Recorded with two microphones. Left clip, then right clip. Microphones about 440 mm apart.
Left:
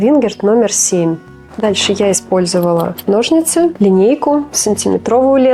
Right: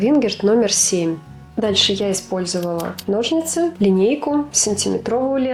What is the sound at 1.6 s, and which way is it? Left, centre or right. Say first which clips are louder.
Speech: left 5 dB; left.